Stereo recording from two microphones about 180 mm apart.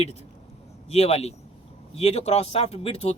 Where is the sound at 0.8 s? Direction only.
35° left (ahead or behind).